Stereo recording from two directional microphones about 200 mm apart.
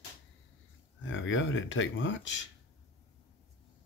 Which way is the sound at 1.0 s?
70° left (ahead or behind).